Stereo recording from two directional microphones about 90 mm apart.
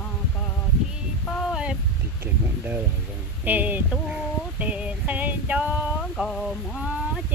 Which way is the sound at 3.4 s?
20° right (ahead or behind).